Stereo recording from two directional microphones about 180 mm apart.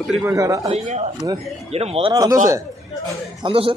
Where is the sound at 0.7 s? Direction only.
35° right (ahead or behind).